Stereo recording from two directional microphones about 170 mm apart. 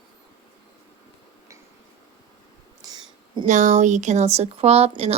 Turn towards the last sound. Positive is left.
turn(degrees=-40)  # may be behind; listen again after turning